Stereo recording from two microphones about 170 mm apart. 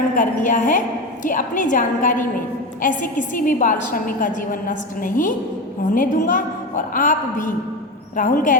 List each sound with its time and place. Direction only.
0.2 s a woman's voice: 50° left (ahead or behind)